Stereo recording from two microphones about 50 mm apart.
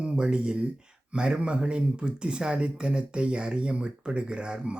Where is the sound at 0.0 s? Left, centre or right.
Centre.